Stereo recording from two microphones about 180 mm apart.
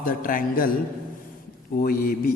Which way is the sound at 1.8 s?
50° left (ahead or behind).